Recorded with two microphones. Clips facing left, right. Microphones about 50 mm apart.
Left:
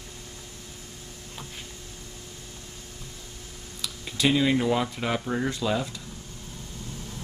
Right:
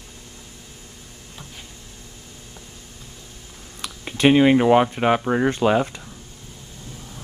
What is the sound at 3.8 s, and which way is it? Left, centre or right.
Speech, right.